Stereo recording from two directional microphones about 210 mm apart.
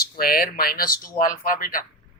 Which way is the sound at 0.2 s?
45° left (ahead or behind).